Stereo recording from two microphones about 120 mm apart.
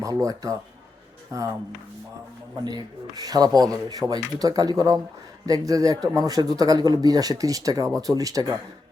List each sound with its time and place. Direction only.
0.0 s speech: 30° right (ahead or behind)
2.6 s speech: 35° right (ahead or behind)